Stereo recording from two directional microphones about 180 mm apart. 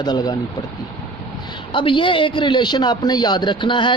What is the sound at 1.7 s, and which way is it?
Speech, 25° left (ahead or behind).